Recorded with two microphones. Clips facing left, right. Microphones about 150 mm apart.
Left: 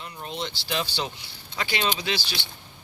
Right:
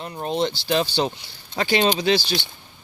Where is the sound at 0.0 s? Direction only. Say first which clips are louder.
Right 10 dB; 40° right (ahead or behind).